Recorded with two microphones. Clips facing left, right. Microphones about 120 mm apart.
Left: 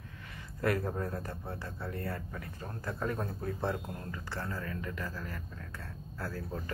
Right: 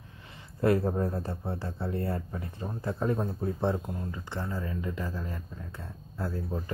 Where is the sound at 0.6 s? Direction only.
25° right (ahead or behind).